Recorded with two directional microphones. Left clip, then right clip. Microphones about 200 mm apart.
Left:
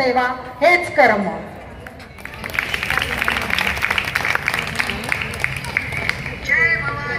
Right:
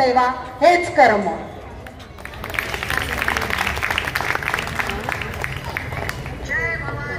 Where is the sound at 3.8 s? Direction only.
30° right (ahead or behind).